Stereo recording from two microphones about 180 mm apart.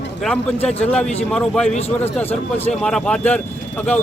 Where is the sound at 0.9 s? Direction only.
5° left (ahead or behind).